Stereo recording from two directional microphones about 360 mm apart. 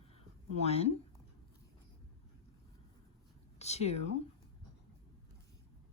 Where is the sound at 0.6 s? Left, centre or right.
Centre.